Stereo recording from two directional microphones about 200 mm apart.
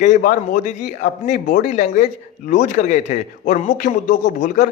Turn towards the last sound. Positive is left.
turn(degrees=40)  # may be behind; listen again after turning